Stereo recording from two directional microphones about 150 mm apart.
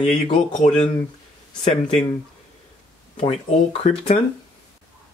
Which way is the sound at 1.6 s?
45° left (ahead or behind).